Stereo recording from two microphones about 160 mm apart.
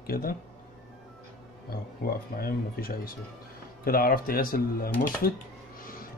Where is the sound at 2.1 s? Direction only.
65° left (ahead or behind).